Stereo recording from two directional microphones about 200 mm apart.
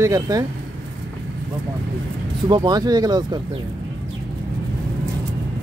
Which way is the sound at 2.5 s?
20° right (ahead or behind).